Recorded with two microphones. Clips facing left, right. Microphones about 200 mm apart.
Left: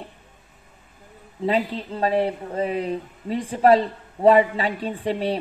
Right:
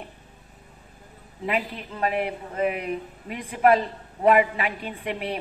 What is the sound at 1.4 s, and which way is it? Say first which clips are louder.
Speech: left 5 dB; 30° left (ahead or behind).